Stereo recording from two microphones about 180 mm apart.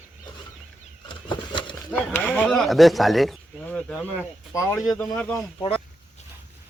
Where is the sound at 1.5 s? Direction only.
25° left (ahead or behind).